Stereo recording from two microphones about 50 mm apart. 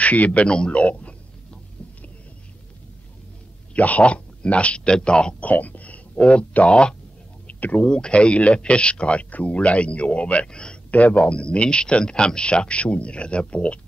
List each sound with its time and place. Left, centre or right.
0.0 s a sound: left
3.7 s speech: left
5.4 s speech: left; by 7.0 s centre
7.4 s a sound: left
7.9 s speech: left
10.9 s speech: left